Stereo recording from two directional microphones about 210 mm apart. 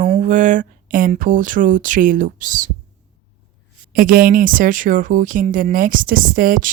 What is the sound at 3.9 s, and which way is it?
Speech, 45° right (ahead or behind).